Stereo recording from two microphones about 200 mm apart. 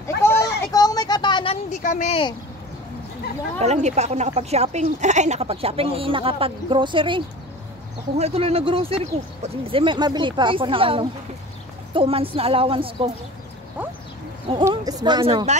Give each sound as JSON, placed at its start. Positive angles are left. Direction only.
{"t": 0.2, "sound": "a sound", "side_deg": 15}
{"t": 1.8, "sound": "speech", "side_deg": 40}
{"t": 3.6, "sound": "speech", "side_deg": -35}
{"t": 14.6, "sound": "speech", "side_deg": -20}